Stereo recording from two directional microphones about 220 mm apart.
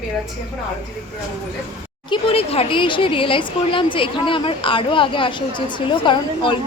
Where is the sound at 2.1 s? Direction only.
25° left (ahead or behind).